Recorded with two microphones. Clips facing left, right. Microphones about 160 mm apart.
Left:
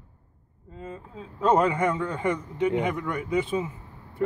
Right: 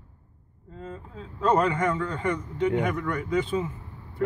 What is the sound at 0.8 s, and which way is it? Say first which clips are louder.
A man's voice: even; 10° left (ahead or behind).